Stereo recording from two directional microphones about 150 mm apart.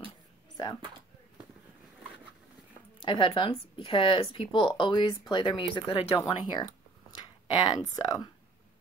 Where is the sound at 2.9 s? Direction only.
35° left (ahead or behind).